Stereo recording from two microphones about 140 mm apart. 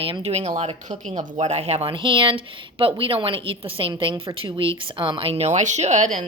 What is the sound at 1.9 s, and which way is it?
Speech, 35° right (ahead or behind).